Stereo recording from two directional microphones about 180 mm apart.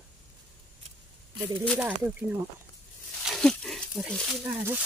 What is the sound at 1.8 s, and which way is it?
Speech, 10° right (ahead or behind).